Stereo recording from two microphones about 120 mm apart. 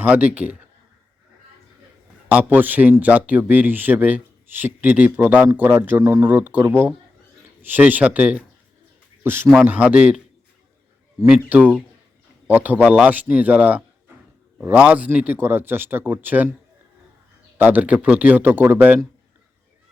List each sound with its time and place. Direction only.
0.0 s speech: 15° right (ahead or behind)
2.3 s speech: 15° right (ahead or behind)
11.3 s speech: 15° right (ahead or behind)
17.6 s speech: 15° right (ahead or behind)